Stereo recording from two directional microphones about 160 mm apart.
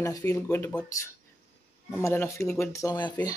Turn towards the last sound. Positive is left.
turn(degrees=25)  # may be behind; listen again after turning